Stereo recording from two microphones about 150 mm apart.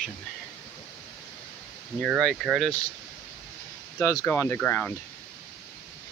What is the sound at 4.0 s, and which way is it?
Speech, 20° left (ahead or behind).